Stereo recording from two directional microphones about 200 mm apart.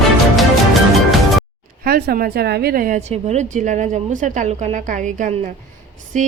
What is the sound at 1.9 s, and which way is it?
A woman's voice, 50° right (ahead or behind).